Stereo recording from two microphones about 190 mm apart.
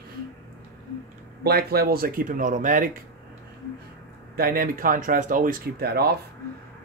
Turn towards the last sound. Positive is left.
turn(degrees=-55)  # may be behind; listen again after turning